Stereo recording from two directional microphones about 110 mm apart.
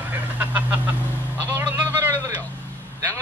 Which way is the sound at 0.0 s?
15° right (ahead or behind).